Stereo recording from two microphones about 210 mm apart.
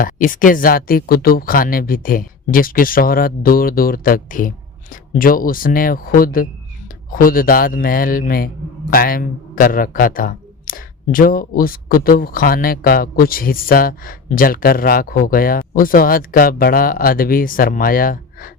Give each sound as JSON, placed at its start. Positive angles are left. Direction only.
{"t": 0.0, "sound": "a man's voice", "side_deg": 40}